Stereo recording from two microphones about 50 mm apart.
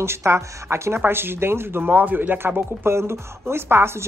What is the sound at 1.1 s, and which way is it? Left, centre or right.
Speech, right.